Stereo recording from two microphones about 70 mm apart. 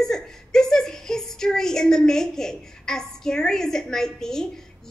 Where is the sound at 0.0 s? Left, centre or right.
Centre.